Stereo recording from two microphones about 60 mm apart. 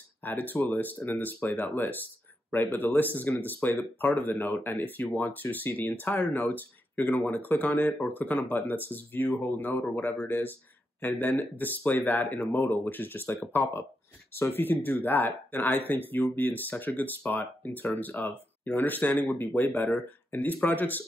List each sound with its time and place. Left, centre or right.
0.2 s speech: left